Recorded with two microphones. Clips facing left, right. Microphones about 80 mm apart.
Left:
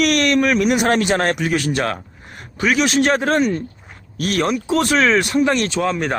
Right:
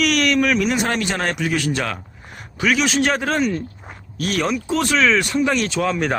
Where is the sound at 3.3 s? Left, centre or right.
Centre.